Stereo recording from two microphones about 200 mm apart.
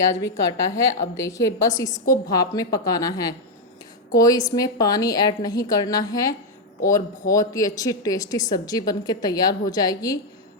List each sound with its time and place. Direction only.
0.5 s a woman's voice: 15° left (ahead or behind)